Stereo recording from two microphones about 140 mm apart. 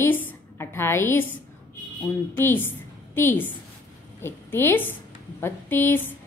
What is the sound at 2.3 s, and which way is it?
Speech, 15° left (ahead or behind).